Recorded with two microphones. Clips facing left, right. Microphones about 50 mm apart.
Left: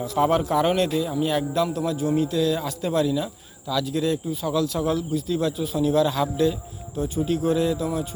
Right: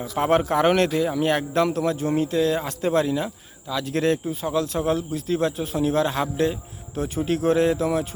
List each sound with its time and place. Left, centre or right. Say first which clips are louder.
0.2 s speech: right 1 dB; right
0.7 s speech: right 2 dB; right
3.8 s speech: right 5 dB; right
4.3 s a man's voice: even; right
6.9 s speech: even; right